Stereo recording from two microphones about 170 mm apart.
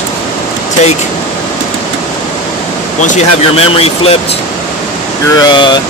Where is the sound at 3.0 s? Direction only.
40° left (ahead or behind).